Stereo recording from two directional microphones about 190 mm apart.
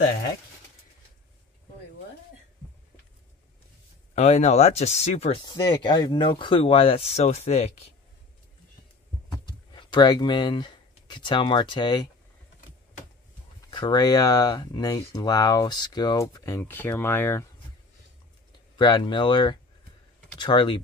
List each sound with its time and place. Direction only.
4.1 s speech: 35° left (ahead or behind)
9.8 s speech: 25° left (ahead or behind)
13.6 s speech: 25° left (ahead or behind)
18.8 s speech: 25° left (ahead or behind)